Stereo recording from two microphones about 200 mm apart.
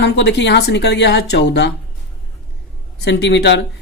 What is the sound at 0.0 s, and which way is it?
Speech, 60° left (ahead or behind).